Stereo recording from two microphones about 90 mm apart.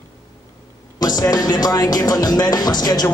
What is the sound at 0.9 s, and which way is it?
Speech, 50° left (ahead or behind).